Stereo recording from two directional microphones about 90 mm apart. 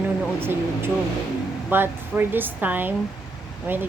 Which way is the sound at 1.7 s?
20° right (ahead or behind).